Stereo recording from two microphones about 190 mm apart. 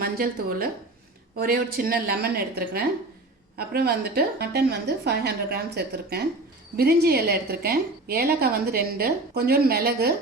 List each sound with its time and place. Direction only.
0.0 s a woman's voice: 50° right (ahead or behind)